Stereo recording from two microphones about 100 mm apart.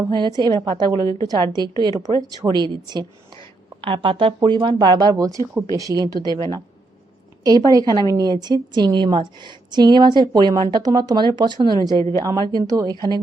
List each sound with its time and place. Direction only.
0.1 s speech: 45° right (ahead or behind)
0.9 s a woman's voice: 35° left (ahead or behind)
1.3 s a woman's voice: 45° right (ahead or behind)
3.8 s a woman's voice: 60° right (ahead or behind); by 6.3 s 40° right (ahead or behind)
7.4 s a woman's voice: 40° right (ahead or behind)